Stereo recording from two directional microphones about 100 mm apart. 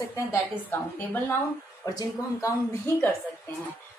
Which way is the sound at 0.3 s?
20° left (ahead or behind).